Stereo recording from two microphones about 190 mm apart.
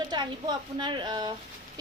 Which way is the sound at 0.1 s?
25° right (ahead or behind).